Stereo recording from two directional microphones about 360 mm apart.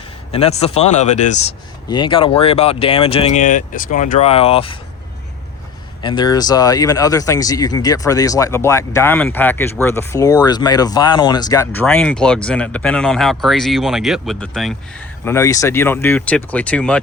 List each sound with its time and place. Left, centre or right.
0.3 s speech: centre
6.0 s speech: centre